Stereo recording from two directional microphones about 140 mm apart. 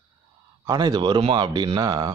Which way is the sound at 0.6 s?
30° right (ahead or behind).